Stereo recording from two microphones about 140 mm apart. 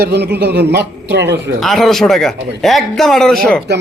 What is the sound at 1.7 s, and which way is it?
A man's voice, 5° left (ahead or behind).